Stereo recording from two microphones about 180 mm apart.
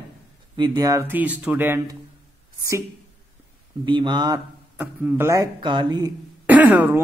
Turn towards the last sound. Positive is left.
turn(degrees=-10)  # may be behind; listen again after turning